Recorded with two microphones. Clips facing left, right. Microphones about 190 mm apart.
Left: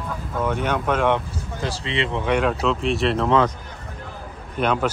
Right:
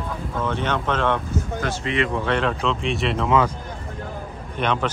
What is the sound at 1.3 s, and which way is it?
Speech, 30° left (ahead or behind).